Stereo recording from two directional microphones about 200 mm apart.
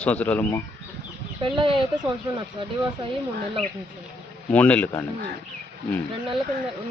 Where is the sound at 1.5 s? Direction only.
25° right (ahead or behind).